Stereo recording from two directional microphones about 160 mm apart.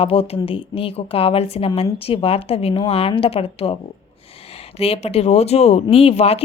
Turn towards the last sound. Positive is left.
turn(degrees=40)  # may be behind; listen again after turning